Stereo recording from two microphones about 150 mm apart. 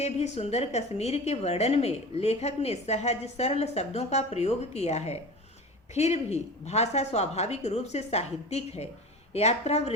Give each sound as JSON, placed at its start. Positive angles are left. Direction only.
{"t": 0.0, "sound": "a woman's voice", "side_deg": 45}